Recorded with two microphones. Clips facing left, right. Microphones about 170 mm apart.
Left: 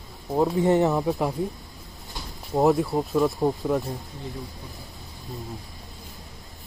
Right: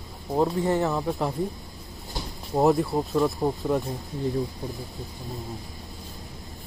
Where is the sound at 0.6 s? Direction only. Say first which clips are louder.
Left 4 dB; 20° left (ahead or behind).